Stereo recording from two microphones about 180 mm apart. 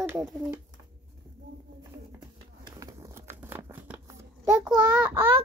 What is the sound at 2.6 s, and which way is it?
Crumpling, 20° right (ahead or behind).